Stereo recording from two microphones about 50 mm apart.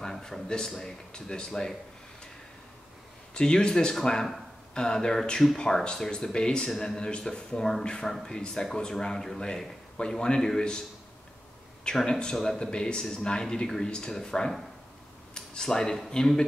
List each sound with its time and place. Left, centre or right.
0.0 s speech: centre
3.3 s speech: centre
11.8 s speech: centre